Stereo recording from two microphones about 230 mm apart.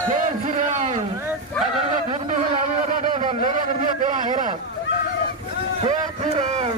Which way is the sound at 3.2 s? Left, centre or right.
Right.